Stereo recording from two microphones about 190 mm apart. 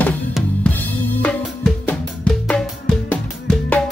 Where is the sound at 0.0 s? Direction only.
10° left (ahead or behind).